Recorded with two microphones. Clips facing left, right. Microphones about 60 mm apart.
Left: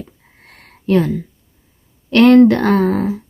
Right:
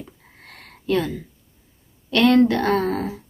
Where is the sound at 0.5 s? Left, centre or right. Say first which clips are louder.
Left 6 dB; left.